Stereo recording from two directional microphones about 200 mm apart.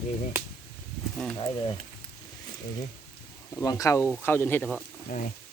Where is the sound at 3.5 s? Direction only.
15° left (ahead or behind).